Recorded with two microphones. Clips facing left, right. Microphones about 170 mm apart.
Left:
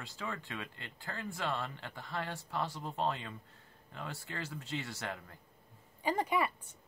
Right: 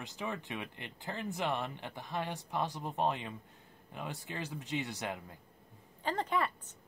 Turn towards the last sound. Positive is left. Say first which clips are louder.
# left 1 dB
turn(degrees=10)  # may be behind; listen again after turning